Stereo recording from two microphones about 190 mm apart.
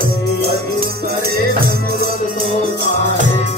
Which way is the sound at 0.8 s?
55° right (ahead or behind).